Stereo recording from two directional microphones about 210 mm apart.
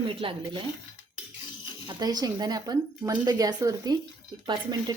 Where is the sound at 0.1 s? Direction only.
25° right (ahead or behind).